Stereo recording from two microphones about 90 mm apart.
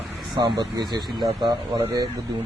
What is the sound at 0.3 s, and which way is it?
Speech, 50° right (ahead or behind).